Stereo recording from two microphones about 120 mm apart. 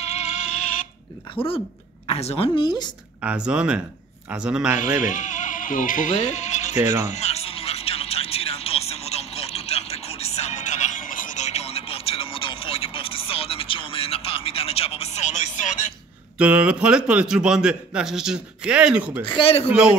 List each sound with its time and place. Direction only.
0.0 s a sound: 70° left (ahead or behind)
1.3 s a man's voice: 50° left (ahead or behind)
2.6 s speech: 35° left (ahead or behind)
3.2 s a man's voice: 10° right (ahead or behind)
5.0 s music: 90° left
16.3 s a man's voice: 10° right (ahead or behind)
19.2 s a man's voice: 45° left (ahead or behind)